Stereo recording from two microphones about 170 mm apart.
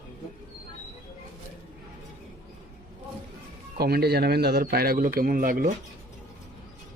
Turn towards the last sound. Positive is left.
turn(degrees=-55)  # may be behind; listen again after turning